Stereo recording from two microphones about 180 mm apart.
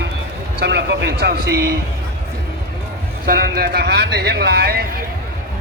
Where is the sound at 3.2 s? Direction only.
55° right (ahead or behind).